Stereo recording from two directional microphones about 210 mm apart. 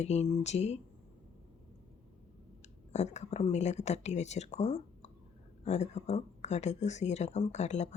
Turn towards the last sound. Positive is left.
turn(degrees=30)  # may be behind; listen again after turning